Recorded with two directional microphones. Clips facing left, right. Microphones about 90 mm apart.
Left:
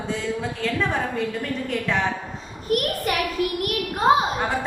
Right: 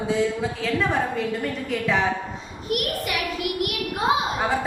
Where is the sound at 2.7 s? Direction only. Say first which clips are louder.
Left 3 dB; 40° left (ahead or behind).